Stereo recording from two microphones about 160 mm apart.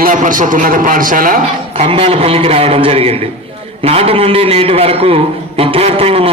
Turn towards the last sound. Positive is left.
turn(degrees=-40)  # may be behind; listen again after turning